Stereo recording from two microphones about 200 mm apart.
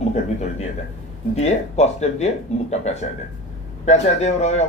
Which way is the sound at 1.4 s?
35° left (ahead or behind).